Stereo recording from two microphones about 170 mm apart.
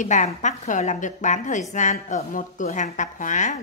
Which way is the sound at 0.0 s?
45° left (ahead or behind).